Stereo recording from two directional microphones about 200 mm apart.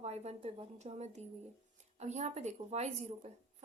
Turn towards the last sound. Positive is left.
turn(degrees=-35)  # may be behind; listen again after turning